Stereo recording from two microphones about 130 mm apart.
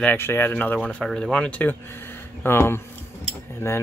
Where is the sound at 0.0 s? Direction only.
15° left (ahead or behind).